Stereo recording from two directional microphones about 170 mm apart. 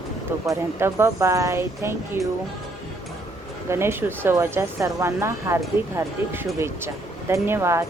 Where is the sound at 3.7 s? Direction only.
15° right (ahead or behind).